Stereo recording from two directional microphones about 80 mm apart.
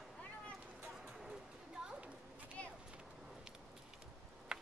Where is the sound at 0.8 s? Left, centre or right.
Centre.